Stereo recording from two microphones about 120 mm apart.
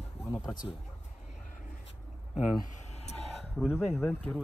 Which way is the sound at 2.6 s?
75° left (ahead or behind).